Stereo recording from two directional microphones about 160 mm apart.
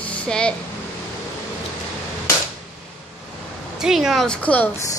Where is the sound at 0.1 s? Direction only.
5° left (ahead or behind).